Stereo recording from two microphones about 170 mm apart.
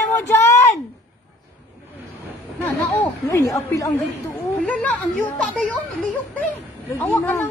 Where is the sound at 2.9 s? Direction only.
15° left (ahead or behind).